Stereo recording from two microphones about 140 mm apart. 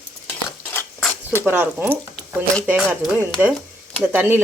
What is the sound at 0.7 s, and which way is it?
Patter, 15° left (ahead or behind).